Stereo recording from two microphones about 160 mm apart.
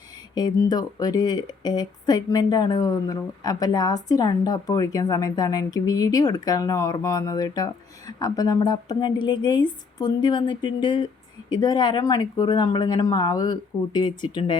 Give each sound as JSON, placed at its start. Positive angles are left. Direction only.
{"t": 0.3, "sound": "speech", "side_deg": 25}